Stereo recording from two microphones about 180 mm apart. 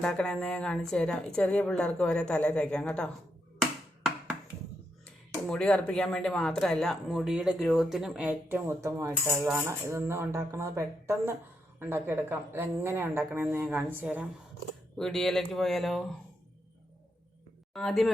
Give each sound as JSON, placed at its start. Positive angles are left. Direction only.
{"t": 0.0, "sound": "speech", "side_deg": 5}
{"t": 5.5, "sound": "a woman's voice", "side_deg": 5}
{"t": 14.9, "sound": "speech", "side_deg": 5}
{"t": 17.7, "sound": "speech", "side_deg": 0}